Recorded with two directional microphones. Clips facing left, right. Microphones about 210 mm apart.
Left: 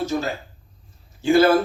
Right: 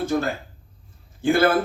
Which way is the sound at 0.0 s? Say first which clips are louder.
Right 1 dB; 55° right (ahead or behind).